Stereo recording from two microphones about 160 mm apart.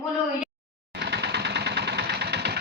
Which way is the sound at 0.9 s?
90° right.